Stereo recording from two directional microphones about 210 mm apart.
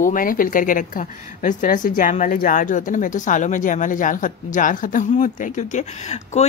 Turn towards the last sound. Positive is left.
turn(degrees=30)  # may be behind; listen again after turning